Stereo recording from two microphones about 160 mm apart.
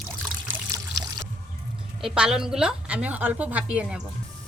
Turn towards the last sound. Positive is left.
turn(degrees=-5)  # may be behind; listen again after turning